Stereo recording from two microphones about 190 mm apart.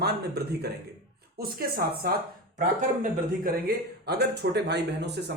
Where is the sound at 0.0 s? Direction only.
55° right (ahead or behind).